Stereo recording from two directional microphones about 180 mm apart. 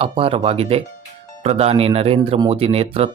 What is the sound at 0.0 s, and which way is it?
Speech, 30° right (ahead or behind).